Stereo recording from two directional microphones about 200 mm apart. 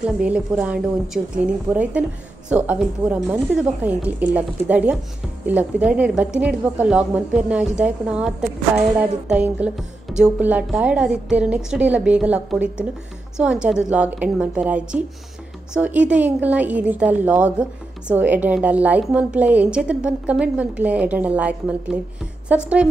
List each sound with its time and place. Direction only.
0.0 s a woman's voice: 5° right (ahead or behind)